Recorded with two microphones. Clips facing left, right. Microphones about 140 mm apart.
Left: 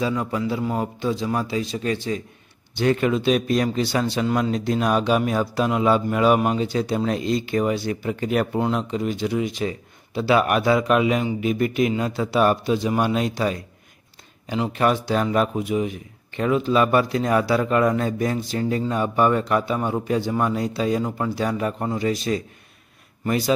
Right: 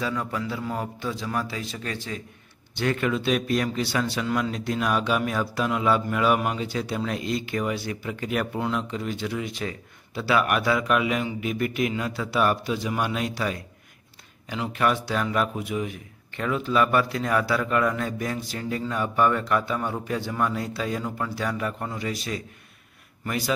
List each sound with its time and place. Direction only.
0.0 s a man's voice: 20° left (ahead or behind)